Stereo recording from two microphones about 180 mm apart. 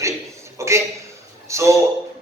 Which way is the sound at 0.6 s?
15° right (ahead or behind).